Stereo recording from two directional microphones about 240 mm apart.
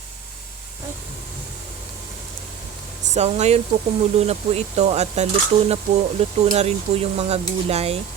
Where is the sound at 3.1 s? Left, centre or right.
Right.